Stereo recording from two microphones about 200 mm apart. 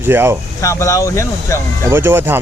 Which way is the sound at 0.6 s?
15° left (ahead or behind).